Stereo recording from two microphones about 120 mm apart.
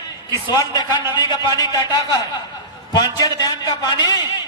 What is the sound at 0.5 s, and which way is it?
A man's voice, 35° left (ahead or behind).